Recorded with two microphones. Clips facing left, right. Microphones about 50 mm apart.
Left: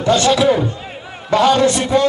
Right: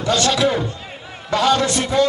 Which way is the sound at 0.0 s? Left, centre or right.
Left.